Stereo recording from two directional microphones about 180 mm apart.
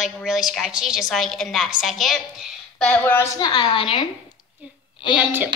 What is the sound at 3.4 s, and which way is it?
Speech, 25° left (ahead or behind).